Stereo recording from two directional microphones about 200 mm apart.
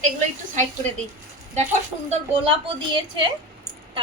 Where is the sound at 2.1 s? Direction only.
25° right (ahead or behind).